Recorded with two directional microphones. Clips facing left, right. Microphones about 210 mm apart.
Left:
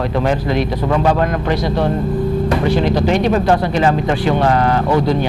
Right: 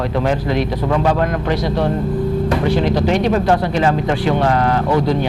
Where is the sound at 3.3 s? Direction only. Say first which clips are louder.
Left 1 dB; 15° left (ahead or behind).